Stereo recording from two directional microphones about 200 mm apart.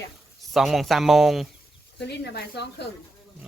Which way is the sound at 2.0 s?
55° left (ahead or behind).